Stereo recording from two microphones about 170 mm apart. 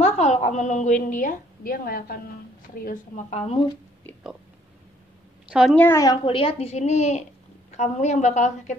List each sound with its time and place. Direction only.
0.0 s a woman's voice: 40° left (ahead or behind)
5.5 s a woman's voice: centre (ahead or behind)
5.8 s a woman's voice: 15° left (ahead or behind)
6.2 s a woman's voice: 35° left (ahead or behind)